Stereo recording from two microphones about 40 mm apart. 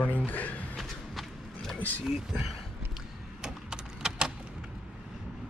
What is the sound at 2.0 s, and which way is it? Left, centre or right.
Speech, centre.